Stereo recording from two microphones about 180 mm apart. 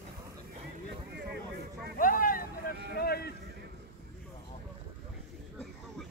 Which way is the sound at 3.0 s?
60° left (ahead or behind).